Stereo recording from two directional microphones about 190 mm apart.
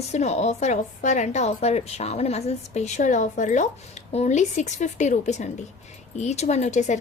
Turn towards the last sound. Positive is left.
turn(degrees=40)  # may be behind; listen again after turning